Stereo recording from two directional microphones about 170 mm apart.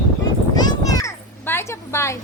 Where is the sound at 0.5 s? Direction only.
20° left (ahead or behind).